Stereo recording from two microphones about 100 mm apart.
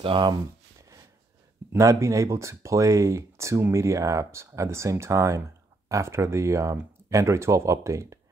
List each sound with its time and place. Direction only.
0.0 s speech: 55° right (ahead or behind)
0.7 s a sound: 30° right (ahead or behind)
1.7 s speech: 30° right (ahead or behind)